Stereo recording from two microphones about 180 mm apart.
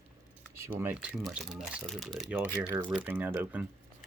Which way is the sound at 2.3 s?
10° right (ahead or behind).